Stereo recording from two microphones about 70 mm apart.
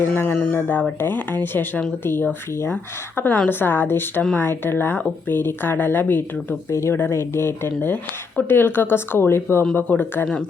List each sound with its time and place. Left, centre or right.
0.1 s speech: left
3.2 s speech: left
6.7 s speech: left